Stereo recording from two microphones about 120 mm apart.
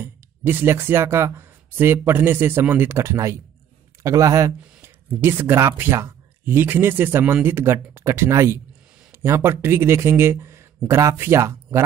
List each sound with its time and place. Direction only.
0.0 s speech: 15° right (ahead or behind)